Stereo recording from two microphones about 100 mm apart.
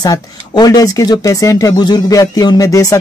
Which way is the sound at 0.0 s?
40° left (ahead or behind).